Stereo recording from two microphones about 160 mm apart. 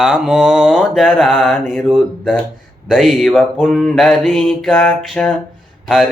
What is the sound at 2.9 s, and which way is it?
Mantra, centre (ahead or behind).